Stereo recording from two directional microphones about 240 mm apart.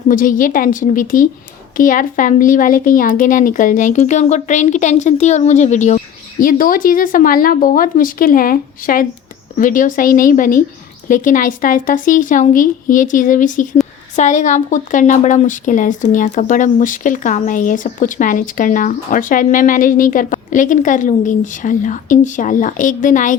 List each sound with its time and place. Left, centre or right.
0.1 s speech: left